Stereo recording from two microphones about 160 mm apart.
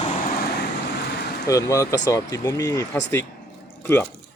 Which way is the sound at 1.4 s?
20° left (ahead or behind).